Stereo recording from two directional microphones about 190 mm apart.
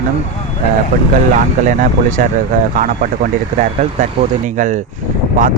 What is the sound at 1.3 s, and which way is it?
Speech, 45° right (ahead or behind).